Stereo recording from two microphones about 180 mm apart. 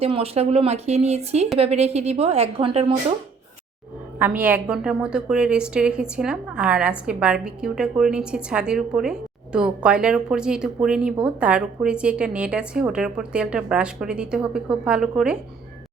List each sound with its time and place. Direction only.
0.0 s speech: 35° right (ahead or behind)
4.2 s a woman's voice: 10° right (ahead or behind)